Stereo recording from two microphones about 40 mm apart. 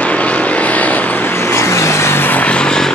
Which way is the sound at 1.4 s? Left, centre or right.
Left.